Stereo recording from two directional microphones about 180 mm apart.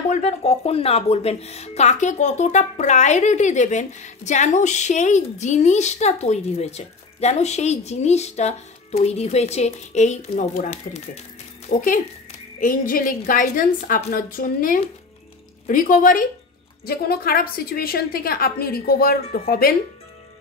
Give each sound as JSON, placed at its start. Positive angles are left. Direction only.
{"t": 0.1, "sound": "speech", "side_deg": 35}
{"t": 12.5, "sound": "a woman's voice", "side_deg": 50}